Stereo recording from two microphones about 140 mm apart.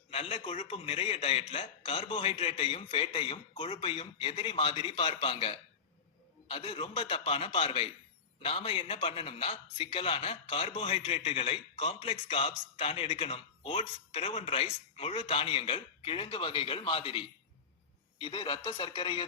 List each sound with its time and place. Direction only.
0.1 s a man's voice: 40° left (ahead or behind)